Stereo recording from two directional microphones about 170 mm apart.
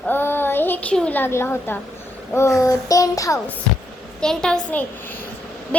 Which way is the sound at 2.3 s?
15° left (ahead or behind).